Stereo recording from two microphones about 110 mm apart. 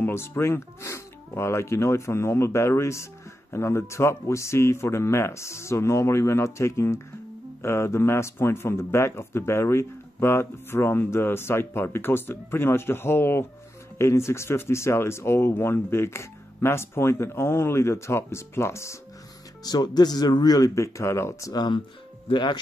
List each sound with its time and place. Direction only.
0.0 s speech: 20° left (ahead or behind)
19.6 s speech: 40° left (ahead or behind)